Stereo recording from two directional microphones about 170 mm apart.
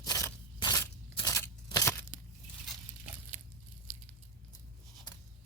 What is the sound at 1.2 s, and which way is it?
Tearing, 20° left (ahead or behind).